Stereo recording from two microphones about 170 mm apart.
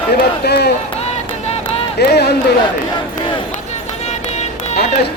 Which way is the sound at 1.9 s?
75° left (ahead or behind).